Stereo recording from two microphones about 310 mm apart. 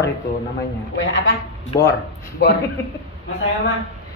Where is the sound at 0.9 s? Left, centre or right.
Left.